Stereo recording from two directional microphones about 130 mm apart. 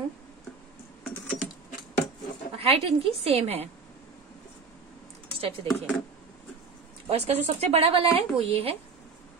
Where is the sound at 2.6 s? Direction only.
50° right (ahead or behind).